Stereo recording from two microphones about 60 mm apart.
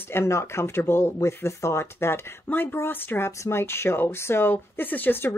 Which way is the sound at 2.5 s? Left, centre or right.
Left.